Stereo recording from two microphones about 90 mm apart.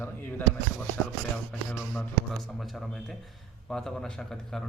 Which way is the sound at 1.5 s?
15° left (ahead or behind).